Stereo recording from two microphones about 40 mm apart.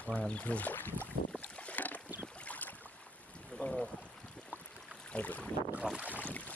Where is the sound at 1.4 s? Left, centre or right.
Left.